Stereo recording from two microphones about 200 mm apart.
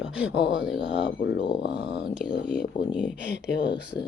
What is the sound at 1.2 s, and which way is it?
Speech, 60° left (ahead or behind).